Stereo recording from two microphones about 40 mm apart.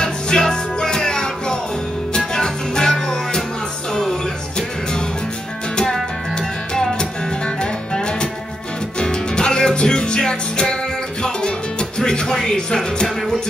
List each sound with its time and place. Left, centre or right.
0.0 s music: centre
6.3 s music: centre
12.0 s music: centre